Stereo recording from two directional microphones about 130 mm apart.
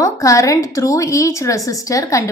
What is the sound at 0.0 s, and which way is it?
A woman's voice, 25° left (ahead or behind).